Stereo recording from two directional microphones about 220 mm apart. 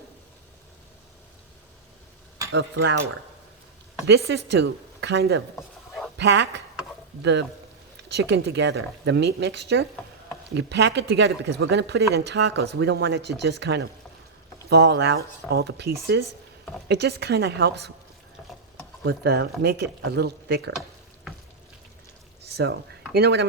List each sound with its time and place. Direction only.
2.5 s speech: 55° right (ahead or behind)
4.0 s speech: 50° right (ahead or behind)
19.0 s speech: 50° right (ahead or behind)
22.4 s frying: 50° right (ahead or behind)
23.1 s speech: 50° right (ahead or behind)